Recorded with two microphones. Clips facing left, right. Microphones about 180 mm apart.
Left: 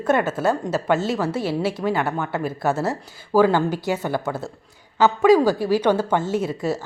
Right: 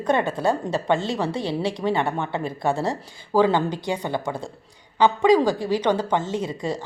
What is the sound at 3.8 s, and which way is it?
Speech, 5° left (ahead or behind).